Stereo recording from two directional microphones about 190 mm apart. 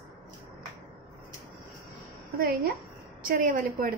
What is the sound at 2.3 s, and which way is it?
A woman's voice, 50° right (ahead or behind).